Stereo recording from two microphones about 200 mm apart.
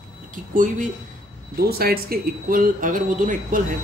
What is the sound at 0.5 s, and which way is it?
Speech, 40° right (ahead or behind).